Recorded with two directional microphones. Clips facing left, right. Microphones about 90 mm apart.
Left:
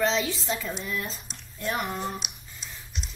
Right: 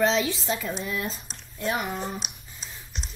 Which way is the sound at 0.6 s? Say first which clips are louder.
Right 2 dB; 25° right (ahead or behind).